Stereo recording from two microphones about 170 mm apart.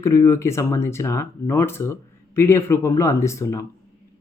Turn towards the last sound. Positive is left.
turn(degrees=15)  # may be behind; listen again after turning